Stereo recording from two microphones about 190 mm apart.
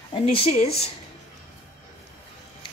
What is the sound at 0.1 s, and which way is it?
Speech, 30° left (ahead or behind).